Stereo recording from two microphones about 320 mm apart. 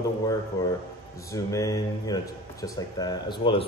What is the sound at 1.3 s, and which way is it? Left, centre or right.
Speech, centre.